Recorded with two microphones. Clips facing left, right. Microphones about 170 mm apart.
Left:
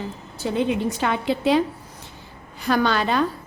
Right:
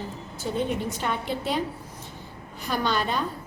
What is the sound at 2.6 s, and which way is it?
Speech, 80° left.